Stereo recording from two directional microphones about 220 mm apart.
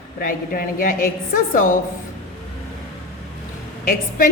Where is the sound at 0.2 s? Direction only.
40° left (ahead or behind).